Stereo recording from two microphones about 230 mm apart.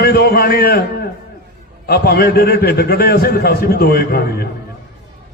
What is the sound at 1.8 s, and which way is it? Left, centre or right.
A man's voice, left.